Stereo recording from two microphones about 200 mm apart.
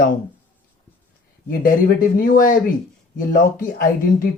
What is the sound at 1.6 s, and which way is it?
A woman's voice, 45° left (ahead or behind).